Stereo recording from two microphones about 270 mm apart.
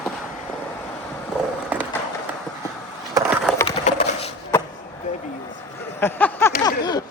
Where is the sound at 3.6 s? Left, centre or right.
Left.